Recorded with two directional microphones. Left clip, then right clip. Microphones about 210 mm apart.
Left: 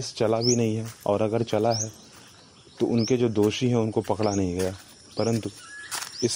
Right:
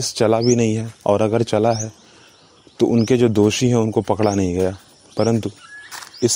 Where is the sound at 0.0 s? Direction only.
45° right (ahead or behind).